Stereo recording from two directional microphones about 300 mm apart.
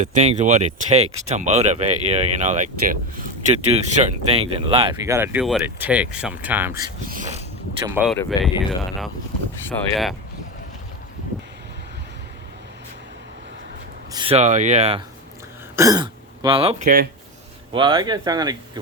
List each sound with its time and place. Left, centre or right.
0.0 s speech: right; by 6.7 s centre
7.1 s a sound: right
7.9 s speech: centre
9.6 s speech: centre
14.1 s speech: centre
15.7 s speech: centre; by 17.1 s right
17.7 s speech: centre